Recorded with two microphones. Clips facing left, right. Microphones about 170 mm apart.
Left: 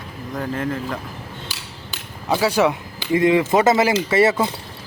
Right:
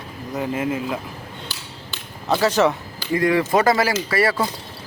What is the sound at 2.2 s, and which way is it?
Speech, 10° left (ahead or behind).